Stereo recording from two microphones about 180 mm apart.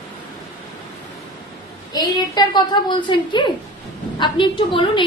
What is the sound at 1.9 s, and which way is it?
A woman's voice, 20° left (ahead or behind).